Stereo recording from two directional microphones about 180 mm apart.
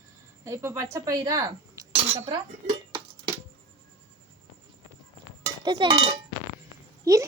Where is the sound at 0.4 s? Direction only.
15° right (ahead or behind).